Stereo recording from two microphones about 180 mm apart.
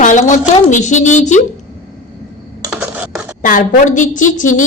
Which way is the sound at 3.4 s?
50° left (ahead or behind).